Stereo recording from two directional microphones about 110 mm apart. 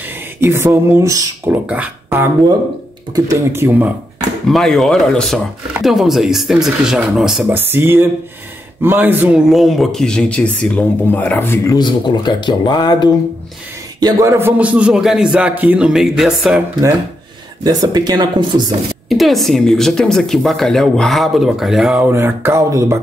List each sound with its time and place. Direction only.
0.4 s speech: 20° right (ahead or behind)
1.5 s speech: 15° right (ahead or behind)
3.3 s speech: 20° right (ahead or behind)
4.5 s speech: centre (ahead or behind)
7.4 s speech: 20° right (ahead or behind)
9.5 s speech: centre (ahead or behind); by 11.7 s 20° left (ahead or behind)
11.7 s speech: 40° left (ahead or behind)
14.2 s speech: 25° right (ahead or behind)
14.6 s speech: 10° right (ahead or behind)
17.6 s speech: 40° right (ahead or behind)
19.0 s speech: centre (ahead or behind)
22.0 s speech: 20° right (ahead or behind)